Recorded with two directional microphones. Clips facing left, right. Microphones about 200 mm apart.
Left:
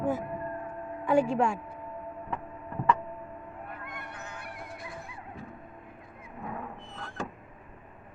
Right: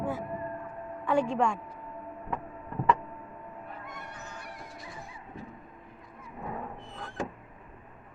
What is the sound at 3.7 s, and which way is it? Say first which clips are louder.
Honk: left 1 dB; 60° left (ahead or behind).